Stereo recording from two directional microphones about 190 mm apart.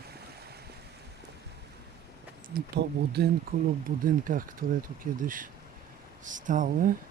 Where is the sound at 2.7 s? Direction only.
60° right (ahead or behind); by 6.9 s 45° right (ahead or behind).